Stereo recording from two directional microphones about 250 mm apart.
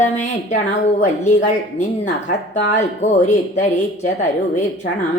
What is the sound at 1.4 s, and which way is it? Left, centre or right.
A woman's voice, left.